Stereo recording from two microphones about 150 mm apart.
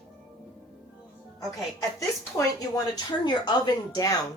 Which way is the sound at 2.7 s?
30° left (ahead or behind).